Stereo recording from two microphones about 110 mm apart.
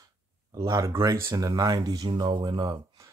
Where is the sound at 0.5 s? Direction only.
30° right (ahead or behind).